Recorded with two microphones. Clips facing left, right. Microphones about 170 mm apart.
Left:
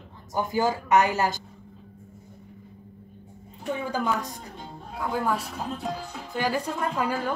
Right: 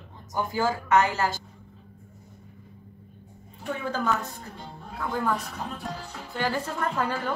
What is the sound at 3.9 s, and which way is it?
Speech, 15° left (ahead or behind).